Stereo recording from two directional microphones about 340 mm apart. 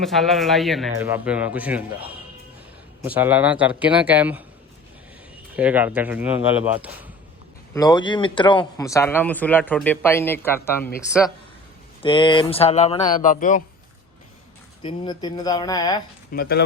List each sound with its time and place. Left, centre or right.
0.0 s speech: centre
5.5 s speech: centre
7.7 s speech: centre
12.0 s speech: centre
14.8 s speech: centre
16.3 s speech: left